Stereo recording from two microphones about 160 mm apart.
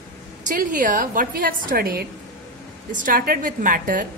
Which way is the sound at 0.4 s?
55° right (ahead or behind).